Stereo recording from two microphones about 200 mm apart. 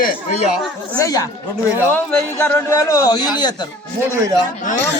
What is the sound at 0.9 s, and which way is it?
A man's voice, 15° left (ahead or behind).